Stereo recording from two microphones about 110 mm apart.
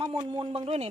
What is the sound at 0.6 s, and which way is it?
Speech, 75° right (ahead or behind).